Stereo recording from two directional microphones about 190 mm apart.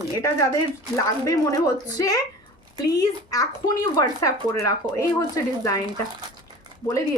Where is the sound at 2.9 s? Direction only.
20° left (ahead or behind).